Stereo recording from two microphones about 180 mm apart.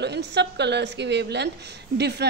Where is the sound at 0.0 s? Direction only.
70° right (ahead or behind).